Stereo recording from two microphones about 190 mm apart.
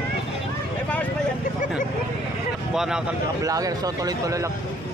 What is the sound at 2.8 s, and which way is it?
Speech, 5° right (ahead or behind).